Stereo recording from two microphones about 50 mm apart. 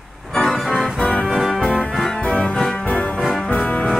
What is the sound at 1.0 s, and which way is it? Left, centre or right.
Music, left.